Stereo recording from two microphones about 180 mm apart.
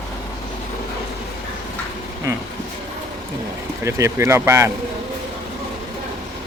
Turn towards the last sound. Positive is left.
turn(degrees=-15)  # may be behind; listen again after turning